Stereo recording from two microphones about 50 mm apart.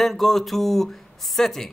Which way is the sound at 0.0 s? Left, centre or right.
Centre.